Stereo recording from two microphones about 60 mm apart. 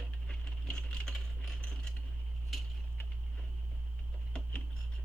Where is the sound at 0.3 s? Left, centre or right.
Centre.